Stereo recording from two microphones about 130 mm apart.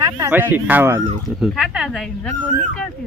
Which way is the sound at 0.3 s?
15° right (ahead or behind).